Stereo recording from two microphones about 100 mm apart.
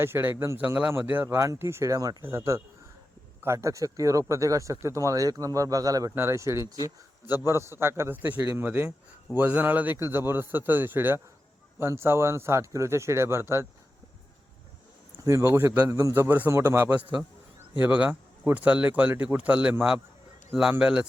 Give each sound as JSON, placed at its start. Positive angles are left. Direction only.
{"t": 0.0, "sound": "a man's voice", "side_deg": -25}
{"t": 6.1, "sound": "a man's voice", "side_deg": -25}
{"t": 15.2, "sound": "a man's voice", "side_deg": -30}